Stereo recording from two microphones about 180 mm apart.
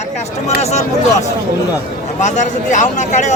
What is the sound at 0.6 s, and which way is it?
Speech, 35° left (ahead or behind).